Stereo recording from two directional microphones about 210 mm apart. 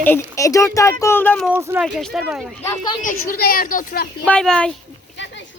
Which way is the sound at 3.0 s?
40° left (ahead or behind).